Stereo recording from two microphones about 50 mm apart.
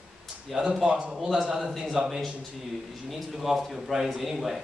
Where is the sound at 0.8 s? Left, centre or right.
Right.